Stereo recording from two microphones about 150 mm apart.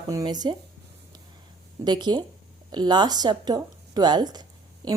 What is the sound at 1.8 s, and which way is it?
Speech, 30° right (ahead or behind).